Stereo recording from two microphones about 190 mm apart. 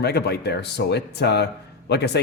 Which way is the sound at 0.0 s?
60° left (ahead or behind).